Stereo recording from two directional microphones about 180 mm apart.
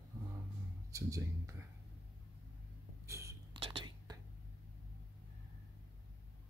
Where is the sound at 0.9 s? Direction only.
15° right (ahead or behind).